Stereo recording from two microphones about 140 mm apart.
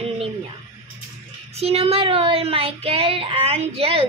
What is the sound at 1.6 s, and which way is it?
Speech, 45° right (ahead or behind).